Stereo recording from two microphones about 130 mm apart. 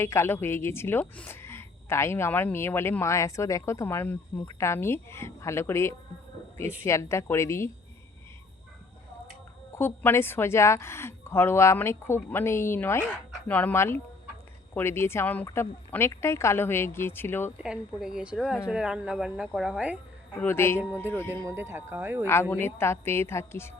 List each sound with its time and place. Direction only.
0.0 s a woman's voice: 20° left (ahead or behind)
9.7 s a woman's voice: 20° left (ahead or behind)
17.6 s speech: 5° right (ahead or behind)
20.4 s speech: 20° left (ahead or behind)
21.4 s speech: 20° right (ahead or behind)
22.3 s a woman's voice: 20° left (ahead or behind)